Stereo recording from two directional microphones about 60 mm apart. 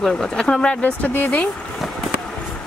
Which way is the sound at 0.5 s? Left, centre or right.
Centre.